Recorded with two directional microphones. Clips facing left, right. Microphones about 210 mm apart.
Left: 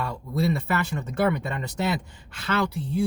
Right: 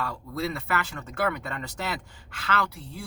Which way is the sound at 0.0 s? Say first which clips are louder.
Left 4 dB; 20° left (ahead or behind).